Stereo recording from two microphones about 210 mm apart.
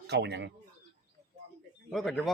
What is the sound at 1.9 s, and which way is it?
Speech, 5° left (ahead or behind).